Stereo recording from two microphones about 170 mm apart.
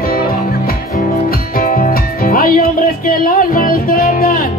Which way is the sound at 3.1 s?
55° left (ahead or behind).